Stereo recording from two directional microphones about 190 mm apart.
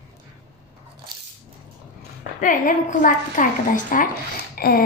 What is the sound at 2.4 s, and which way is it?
A woman's voice, 45° left (ahead or behind).